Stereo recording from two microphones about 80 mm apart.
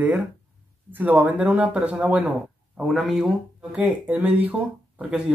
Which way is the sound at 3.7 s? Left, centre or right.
Centre.